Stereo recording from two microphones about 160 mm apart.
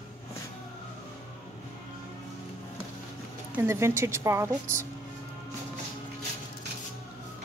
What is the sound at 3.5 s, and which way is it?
Speech, 15° right (ahead or behind).